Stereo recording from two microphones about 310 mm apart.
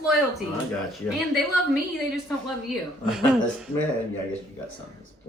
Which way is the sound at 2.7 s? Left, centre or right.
Centre.